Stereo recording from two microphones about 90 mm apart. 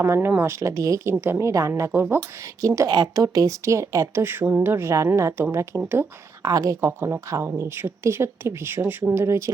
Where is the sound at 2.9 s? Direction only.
45° right (ahead or behind).